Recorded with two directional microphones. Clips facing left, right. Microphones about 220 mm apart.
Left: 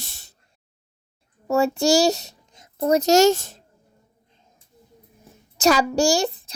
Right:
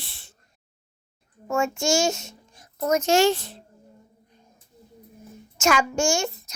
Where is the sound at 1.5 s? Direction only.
35° left (ahead or behind).